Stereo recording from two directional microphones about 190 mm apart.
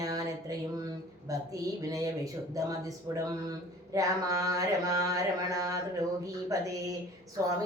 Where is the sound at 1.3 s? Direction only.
15° right (ahead or behind).